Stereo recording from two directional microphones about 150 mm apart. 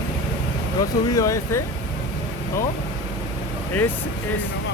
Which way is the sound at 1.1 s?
20° left (ahead or behind).